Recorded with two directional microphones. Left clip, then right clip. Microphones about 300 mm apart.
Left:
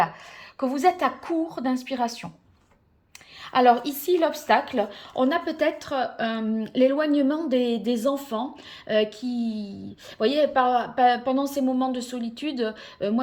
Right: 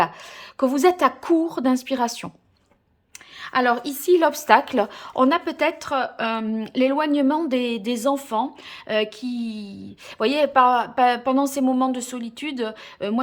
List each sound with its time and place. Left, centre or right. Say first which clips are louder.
0.5 s speech: right 3 dB; right
3.4 s speech: left 2 dB; centre